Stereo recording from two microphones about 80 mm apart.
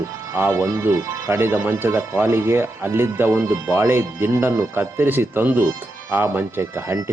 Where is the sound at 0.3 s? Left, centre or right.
Right.